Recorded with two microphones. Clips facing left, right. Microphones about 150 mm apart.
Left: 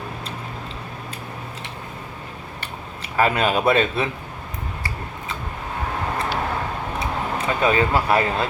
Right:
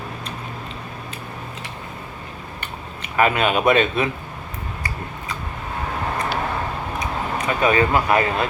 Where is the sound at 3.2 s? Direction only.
35° left (ahead or behind).